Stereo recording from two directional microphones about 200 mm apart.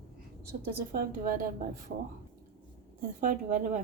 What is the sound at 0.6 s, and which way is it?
Speech, 50° right (ahead or behind).